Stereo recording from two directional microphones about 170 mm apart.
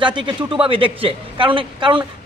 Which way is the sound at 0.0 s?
30° right (ahead or behind).